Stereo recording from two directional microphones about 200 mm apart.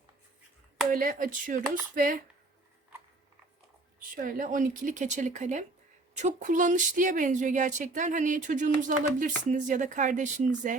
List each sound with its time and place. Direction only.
0.9 s speech: 45° right (ahead or behind)
4.1 s speech: 45° right (ahead or behind)